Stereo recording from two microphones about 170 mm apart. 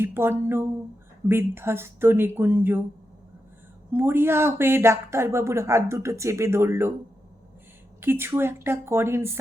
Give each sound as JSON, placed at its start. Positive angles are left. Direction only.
{"t": 0.0, "sound": "speech", "side_deg": -15}
{"t": 3.9, "sound": "speech", "side_deg": -15}
{"t": 8.0, "sound": "speech", "side_deg": -15}